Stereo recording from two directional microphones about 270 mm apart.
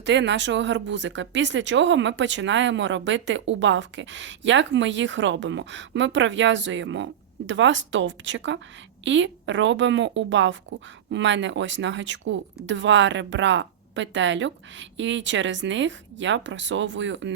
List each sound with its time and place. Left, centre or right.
0.0 s a woman's voice: right